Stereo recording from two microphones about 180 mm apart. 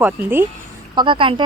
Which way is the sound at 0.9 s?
25° right (ahead or behind).